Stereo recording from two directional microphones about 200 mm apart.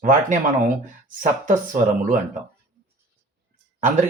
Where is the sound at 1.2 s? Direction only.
40° right (ahead or behind).